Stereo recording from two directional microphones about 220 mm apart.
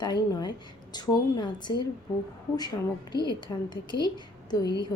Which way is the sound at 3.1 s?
20° left (ahead or behind).